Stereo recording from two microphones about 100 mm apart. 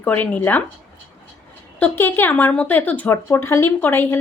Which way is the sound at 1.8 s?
20° left (ahead or behind).